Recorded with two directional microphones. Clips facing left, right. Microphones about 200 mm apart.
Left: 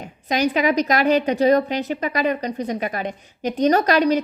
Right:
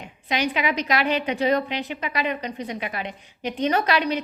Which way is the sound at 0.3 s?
40° left (ahead or behind).